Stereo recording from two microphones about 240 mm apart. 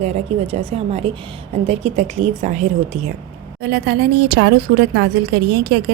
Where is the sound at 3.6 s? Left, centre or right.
Right.